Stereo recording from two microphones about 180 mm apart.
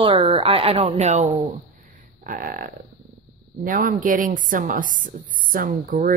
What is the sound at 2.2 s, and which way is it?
Speech, 50° right (ahead or behind).